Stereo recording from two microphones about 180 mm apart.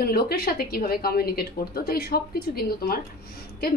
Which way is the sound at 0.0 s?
60° left (ahead or behind).